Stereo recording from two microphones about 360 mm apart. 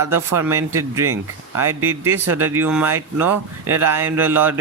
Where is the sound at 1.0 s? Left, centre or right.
Right.